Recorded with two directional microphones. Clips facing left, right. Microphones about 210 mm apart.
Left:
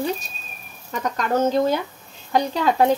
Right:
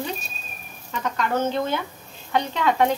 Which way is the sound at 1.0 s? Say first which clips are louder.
Left 3 dB; 40° left (ahead or behind).